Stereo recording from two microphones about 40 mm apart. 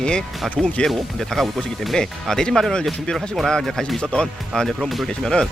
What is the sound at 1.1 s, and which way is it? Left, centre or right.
Speech, centre.